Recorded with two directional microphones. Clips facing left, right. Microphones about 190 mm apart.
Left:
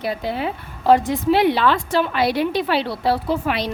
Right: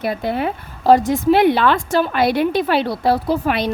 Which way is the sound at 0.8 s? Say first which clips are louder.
Right 3 dB; 40° right (ahead or behind).